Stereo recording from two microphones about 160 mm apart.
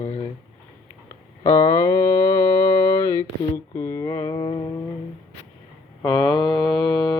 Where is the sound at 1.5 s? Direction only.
20° left (ahead or behind).